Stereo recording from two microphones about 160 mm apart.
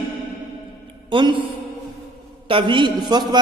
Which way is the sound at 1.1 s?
30° right (ahead or behind).